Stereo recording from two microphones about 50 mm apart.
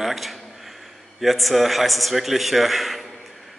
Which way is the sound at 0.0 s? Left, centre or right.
Centre.